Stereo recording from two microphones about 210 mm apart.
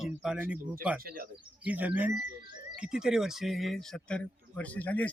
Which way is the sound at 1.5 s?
5° right (ahead or behind).